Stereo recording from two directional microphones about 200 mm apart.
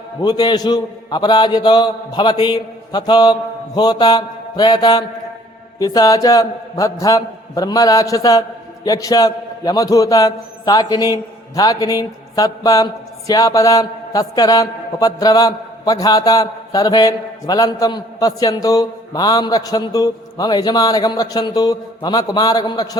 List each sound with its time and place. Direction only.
0.2 s a man's voice: 20° left (ahead or behind)